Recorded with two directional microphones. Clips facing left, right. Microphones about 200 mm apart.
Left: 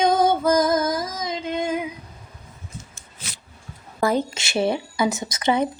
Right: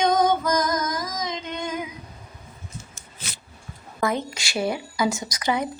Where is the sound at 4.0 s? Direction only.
25° left (ahead or behind).